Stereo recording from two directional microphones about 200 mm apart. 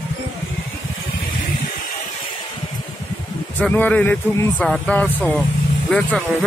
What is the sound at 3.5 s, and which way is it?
Speech, 10° left (ahead or behind).